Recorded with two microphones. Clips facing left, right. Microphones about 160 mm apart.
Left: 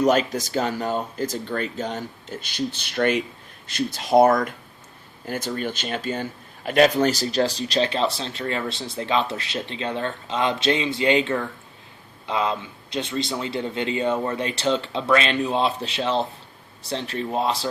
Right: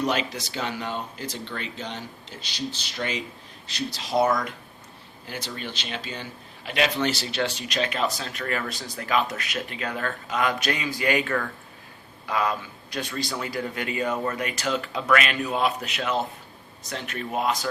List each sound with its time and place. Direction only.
0.0 s speech: 45° left (ahead or behind); by 17.7 s 30° left (ahead or behind)